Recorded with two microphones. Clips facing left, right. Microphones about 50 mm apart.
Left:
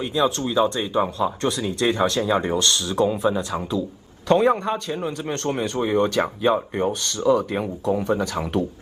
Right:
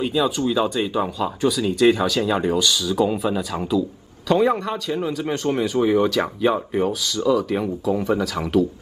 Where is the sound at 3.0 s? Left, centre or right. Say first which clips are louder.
Even; right.